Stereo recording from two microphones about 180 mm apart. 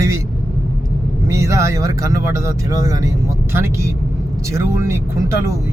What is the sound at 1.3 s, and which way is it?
Speech, 15° right (ahead or behind).